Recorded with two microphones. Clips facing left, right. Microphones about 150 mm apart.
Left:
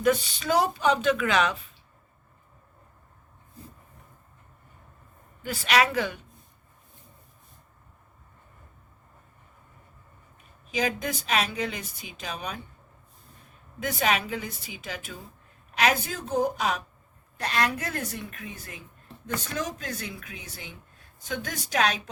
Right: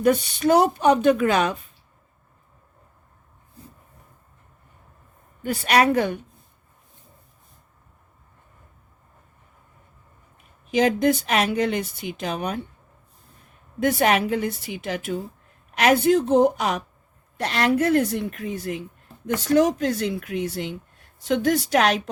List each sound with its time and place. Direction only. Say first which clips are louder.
0.3 s a woman's voice: right 7 dB; 55° right (ahead or behind)
1.1 s speech: right 4 dB; 40° right (ahead or behind)
5.4 s a woman's voice: right 4 dB; 45° right (ahead or behind)
10.7 s speech: right 10 dB; 65° right (ahead or behind)
13.8 s a woman's voice: right 7 dB; 60° right (ahead or behind)